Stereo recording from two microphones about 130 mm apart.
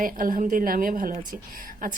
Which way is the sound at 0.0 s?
90° right.